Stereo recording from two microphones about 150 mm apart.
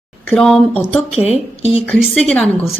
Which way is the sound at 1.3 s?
45° left (ahead or behind).